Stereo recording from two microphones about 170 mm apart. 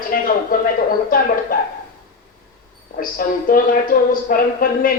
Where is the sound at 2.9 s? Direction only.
55° left (ahead or behind).